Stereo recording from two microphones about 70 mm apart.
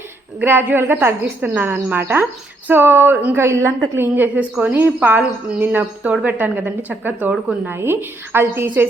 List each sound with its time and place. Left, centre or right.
0.4 s a woman's voice: right
7.7 s speech: right